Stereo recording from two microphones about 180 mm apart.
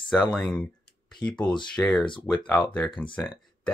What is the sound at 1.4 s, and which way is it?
Speech, 25° left (ahead or behind).